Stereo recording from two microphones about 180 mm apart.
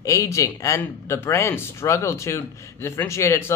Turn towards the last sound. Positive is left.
turn(degrees=15)  # may be behind; listen again after turning